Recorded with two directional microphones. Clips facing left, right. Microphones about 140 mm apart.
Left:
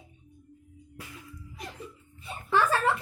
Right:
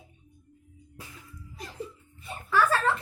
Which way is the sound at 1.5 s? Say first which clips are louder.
Left 1 dB; 35° right (ahead or behind).